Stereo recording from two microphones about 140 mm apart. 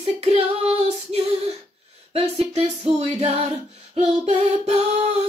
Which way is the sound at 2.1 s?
45° right (ahead or behind).